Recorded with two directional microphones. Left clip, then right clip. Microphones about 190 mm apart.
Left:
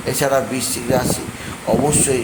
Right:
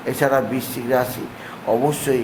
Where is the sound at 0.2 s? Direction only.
10° right (ahead or behind).